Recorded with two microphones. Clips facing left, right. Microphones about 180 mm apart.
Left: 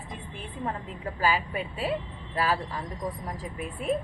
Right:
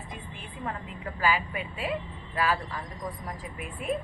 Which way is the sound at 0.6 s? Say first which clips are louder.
Left 2 dB; 35° left (ahead or behind).